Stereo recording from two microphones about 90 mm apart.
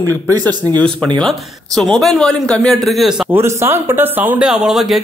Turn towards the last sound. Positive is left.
turn(degrees=-5)  # may be behind; listen again after turning